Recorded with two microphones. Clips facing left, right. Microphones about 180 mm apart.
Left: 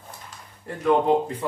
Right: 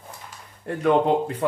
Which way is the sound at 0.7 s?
65° right (ahead or behind).